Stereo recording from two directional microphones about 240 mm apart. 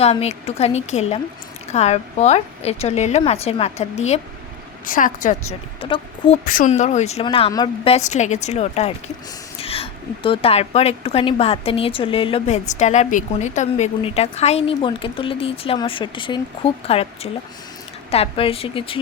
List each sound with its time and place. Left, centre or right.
0.0 s a woman's voice: left
18.1 s a woman's voice: left